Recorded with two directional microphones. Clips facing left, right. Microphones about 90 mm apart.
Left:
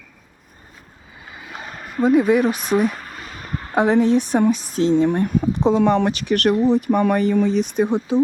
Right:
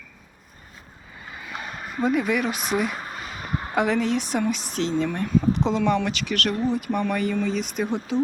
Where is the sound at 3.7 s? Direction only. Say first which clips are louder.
Left 7 dB; 25° left (ahead or behind); by 6.5 s 45° left (ahead or behind).